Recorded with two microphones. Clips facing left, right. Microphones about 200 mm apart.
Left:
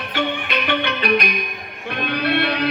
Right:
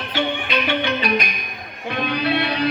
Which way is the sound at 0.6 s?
60° left (ahead or behind).